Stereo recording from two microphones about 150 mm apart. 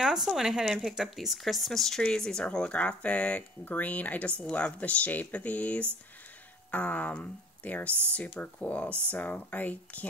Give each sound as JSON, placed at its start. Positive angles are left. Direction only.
{"t": 0.0, "sound": "speech", "side_deg": -5}